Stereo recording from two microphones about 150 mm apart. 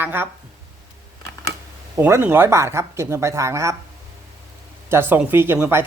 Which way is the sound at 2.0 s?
15° right (ahead or behind).